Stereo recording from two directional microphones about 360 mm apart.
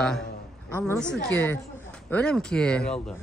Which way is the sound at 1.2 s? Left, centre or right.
Centre.